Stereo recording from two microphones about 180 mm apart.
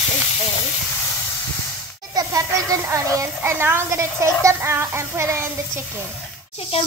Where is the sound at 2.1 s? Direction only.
20° right (ahead or behind).